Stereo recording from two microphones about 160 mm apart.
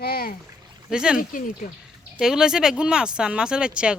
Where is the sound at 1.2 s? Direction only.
55° left (ahead or behind).